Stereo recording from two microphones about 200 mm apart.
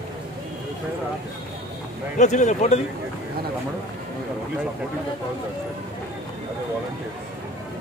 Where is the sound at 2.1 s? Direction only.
35° left (ahead or behind).